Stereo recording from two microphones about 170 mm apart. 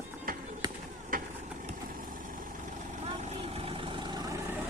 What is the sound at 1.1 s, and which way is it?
Vehicle, 55° right (ahead or behind).